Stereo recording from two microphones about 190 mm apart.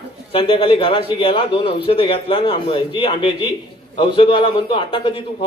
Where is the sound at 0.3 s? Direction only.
25° left (ahead or behind).